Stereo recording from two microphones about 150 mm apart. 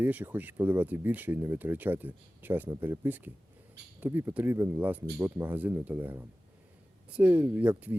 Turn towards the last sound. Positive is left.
turn(degrees=-10)  # may be behind; listen again after turning